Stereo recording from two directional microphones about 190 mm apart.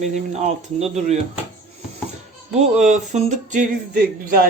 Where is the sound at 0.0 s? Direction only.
40° right (ahead or behind).